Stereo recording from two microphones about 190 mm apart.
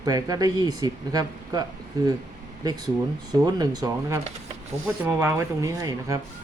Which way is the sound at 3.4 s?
20° right (ahead or behind).